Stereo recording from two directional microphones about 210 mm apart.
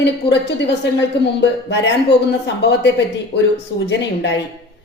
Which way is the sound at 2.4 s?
55° left (ahead or behind).